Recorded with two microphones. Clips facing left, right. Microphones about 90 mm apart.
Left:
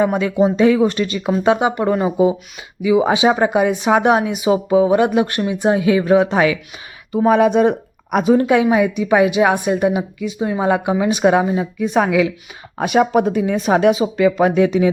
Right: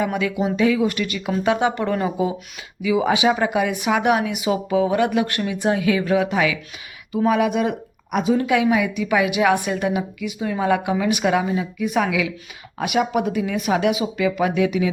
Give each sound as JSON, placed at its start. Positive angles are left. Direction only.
{"t": 0.1, "sound": "speech", "side_deg": 30}